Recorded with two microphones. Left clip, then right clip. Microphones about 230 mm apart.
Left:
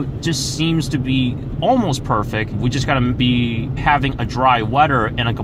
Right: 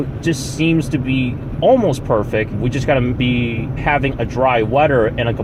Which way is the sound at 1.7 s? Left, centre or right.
Left.